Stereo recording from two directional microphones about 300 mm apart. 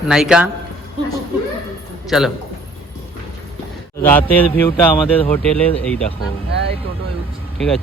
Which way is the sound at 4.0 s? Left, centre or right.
Centre.